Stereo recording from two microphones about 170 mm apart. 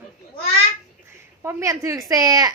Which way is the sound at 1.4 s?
20° right (ahead or behind).